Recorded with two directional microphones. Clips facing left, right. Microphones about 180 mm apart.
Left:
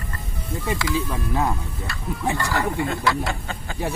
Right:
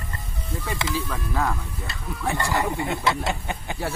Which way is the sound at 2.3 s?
20° right (ahead or behind).